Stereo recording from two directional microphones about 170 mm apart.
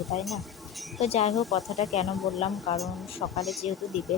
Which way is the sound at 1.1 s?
40° left (ahead or behind).